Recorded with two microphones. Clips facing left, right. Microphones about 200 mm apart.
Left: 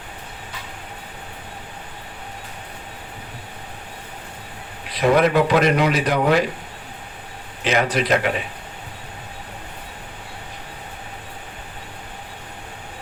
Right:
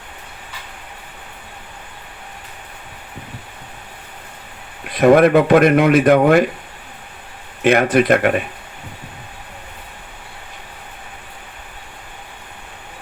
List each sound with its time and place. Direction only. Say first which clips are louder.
4.9 s speech: right 6 dB; 50° right (ahead or behind)
7.6 s speech: right 7 dB; 55° right (ahead or behind)